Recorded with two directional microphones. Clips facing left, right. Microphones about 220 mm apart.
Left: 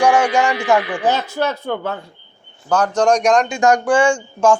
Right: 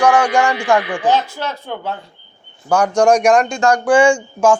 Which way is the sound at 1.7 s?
55° left (ahead or behind).